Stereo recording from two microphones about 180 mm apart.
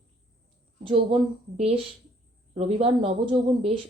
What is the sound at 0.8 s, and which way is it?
Speech, 30° right (ahead or behind).